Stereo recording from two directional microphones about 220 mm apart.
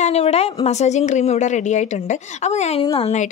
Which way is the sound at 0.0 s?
30° left (ahead or behind).